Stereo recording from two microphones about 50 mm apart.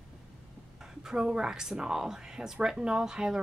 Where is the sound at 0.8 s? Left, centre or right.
Centre.